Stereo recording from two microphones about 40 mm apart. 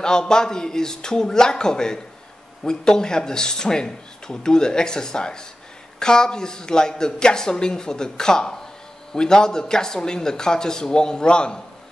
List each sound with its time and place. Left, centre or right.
0.0 s speech: centre